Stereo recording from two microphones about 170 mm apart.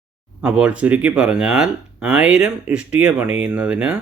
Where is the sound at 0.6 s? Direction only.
5° right (ahead or behind).